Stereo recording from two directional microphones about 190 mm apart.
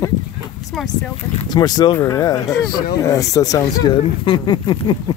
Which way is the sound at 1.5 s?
20° left (ahead or behind).